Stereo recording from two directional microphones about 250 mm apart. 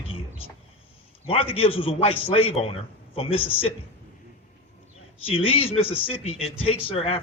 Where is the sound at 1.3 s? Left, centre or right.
Left.